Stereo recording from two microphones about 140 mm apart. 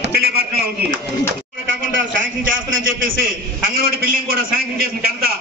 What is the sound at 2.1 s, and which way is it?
A man's voice, 75° right (ahead or behind).